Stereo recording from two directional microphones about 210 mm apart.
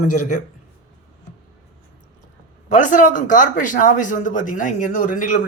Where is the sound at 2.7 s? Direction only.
35° left (ahead or behind).